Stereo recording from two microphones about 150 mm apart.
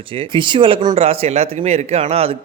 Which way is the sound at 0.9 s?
40° right (ahead or behind).